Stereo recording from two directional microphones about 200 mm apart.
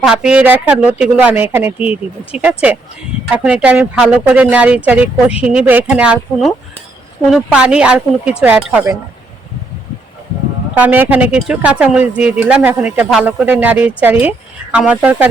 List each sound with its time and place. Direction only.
0.0 s speech: 5° right (ahead or behind)
10.8 s speech: 10° right (ahead or behind)